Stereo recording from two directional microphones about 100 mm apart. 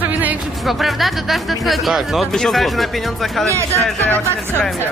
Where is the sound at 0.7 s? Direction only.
Centre (ahead or behind).